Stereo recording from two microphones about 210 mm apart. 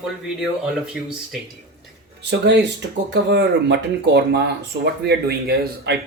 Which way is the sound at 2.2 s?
55° right (ahead or behind).